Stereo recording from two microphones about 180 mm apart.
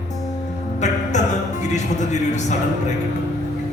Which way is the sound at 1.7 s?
40° left (ahead or behind).